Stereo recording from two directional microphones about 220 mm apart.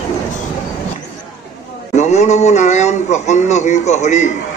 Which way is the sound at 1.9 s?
30° left (ahead or behind).